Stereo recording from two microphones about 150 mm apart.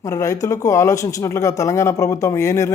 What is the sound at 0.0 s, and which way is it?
A man's voice, 20° left (ahead or behind).